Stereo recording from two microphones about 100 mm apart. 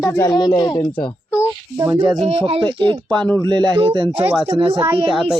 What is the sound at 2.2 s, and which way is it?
Speech, 80° right.